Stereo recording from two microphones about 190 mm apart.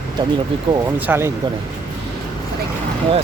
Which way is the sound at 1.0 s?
10° right (ahead or behind).